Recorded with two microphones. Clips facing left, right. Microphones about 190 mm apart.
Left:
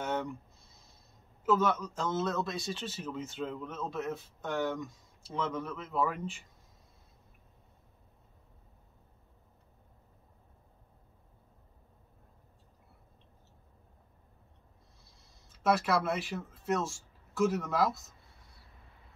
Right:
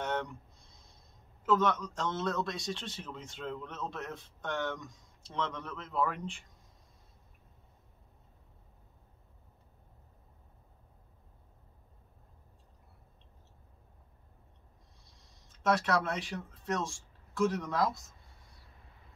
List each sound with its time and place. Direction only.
0.0 s a sound: 5° left (ahead or behind)
1.4 s a man's voice: 5° left (ahead or behind)
15.5 s speech: 5° left (ahead or behind)